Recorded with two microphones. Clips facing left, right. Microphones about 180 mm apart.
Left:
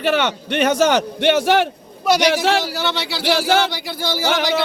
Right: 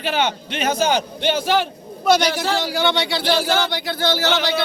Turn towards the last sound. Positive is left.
turn(degrees=10)  # may be behind; listen again after turning